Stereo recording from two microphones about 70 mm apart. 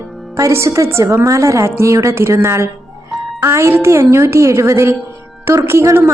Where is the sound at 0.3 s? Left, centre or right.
Right.